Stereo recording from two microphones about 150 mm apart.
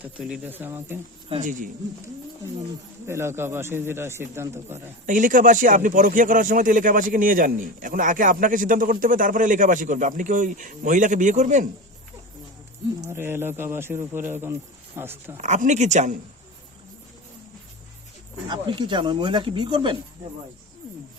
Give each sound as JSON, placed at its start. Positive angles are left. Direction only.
{"t": 0.0, "sound": "speech", "side_deg": -10}
{"t": 1.4, "sound": "speech", "side_deg": -60}
{"t": 3.1, "sound": "speech", "side_deg": -15}
{"t": 5.0, "sound": "speech", "side_deg": -60}
{"t": 13.0, "sound": "speech", "side_deg": -15}
{"t": 15.4, "sound": "speech", "side_deg": -55}
{"t": 18.4, "sound": "speech", "side_deg": -30}